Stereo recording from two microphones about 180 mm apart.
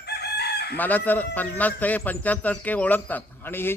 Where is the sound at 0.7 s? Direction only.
10° left (ahead or behind).